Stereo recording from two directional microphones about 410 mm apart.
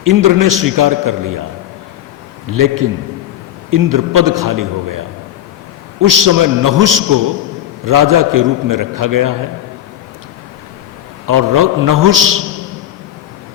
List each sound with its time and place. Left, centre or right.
0.0 s a man's voice: right
2.5 s a man's voice: right
11.3 s a man's voice: right